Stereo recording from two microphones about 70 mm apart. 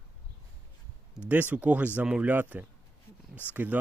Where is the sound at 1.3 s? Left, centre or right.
Right.